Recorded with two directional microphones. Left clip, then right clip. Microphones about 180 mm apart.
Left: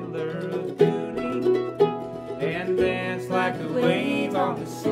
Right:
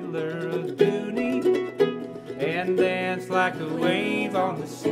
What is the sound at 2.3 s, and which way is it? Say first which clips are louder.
Music: right 1 dB; 40° right (ahead or behind).